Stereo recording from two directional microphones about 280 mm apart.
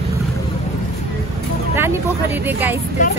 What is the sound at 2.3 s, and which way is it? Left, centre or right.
Speech, centre.